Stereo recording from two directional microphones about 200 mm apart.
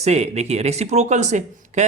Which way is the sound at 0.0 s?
35° right (ahead or behind).